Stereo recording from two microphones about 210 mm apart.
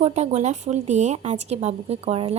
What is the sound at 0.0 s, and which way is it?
A woman's voice, 30° right (ahead or behind).